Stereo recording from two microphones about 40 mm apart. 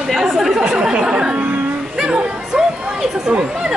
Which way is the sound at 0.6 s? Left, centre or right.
Right.